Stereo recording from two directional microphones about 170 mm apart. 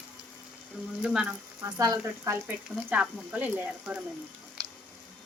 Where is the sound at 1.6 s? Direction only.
20° right (ahead or behind).